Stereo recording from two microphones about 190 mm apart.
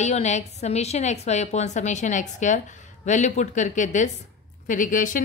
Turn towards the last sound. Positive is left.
turn(degrees=45)  # may be behind; listen again after turning